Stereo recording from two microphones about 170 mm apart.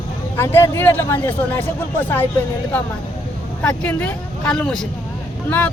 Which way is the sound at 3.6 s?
10° left (ahead or behind).